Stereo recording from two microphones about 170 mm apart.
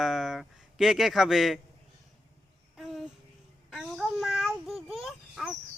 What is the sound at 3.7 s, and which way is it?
Child singing, centre (ahead or behind).